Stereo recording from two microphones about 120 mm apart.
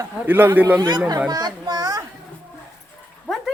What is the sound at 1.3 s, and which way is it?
Speech, 35° right (ahead or behind).